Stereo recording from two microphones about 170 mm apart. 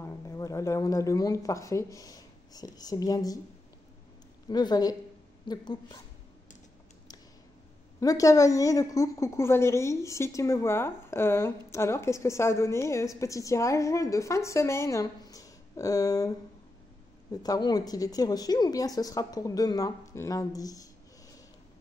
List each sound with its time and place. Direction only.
0.0 s speech: 15° left (ahead or behind)
4.5 s a woman's voice: 25° left (ahead or behind)
8.0 s a woman's voice: 20° left (ahead or behind)